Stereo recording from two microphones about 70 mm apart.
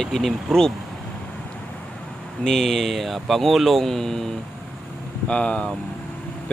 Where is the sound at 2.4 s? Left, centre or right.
Centre.